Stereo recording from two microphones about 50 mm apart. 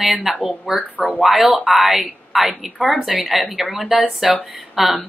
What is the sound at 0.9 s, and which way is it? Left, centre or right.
Speech, left.